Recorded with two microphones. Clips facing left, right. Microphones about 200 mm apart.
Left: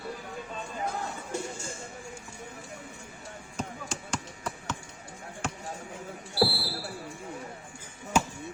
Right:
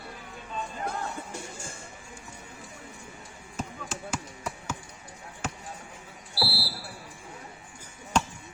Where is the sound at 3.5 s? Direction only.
5° right (ahead or behind).